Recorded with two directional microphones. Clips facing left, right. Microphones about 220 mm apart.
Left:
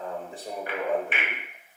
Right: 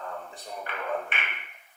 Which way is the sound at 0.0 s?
15° left (ahead or behind).